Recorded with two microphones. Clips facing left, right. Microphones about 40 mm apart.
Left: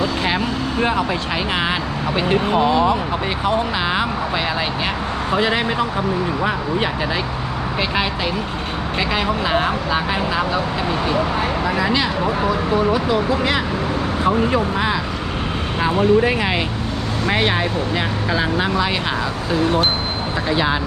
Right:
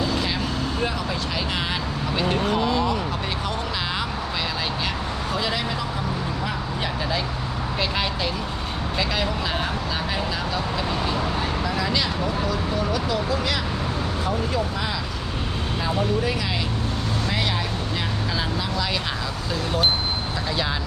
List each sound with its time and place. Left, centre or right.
0.0 s vehicle: left
2.1 s speech: left
5.3 s speech: left
9.0 s speech: left
11.6 s speech: left
20.5 s speech: left